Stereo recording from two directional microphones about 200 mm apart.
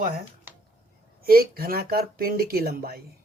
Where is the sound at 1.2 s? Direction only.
50° right (ahead or behind).